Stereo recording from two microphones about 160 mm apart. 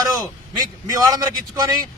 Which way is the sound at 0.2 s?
20° right (ahead or behind).